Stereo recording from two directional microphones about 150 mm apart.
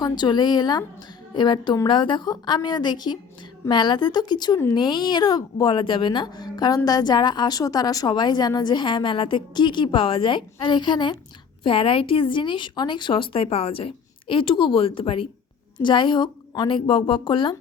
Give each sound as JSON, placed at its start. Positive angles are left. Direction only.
{"t": 0.0, "sound": "a woman's voice", "side_deg": 30}